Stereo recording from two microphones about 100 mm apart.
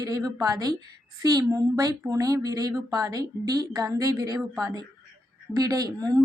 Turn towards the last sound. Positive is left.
turn(degrees=-35)  # may be behind; listen again after turning